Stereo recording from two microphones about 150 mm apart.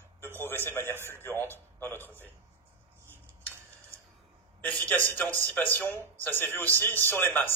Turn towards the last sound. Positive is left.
turn(degrees=15)  # may be behind; listen again after turning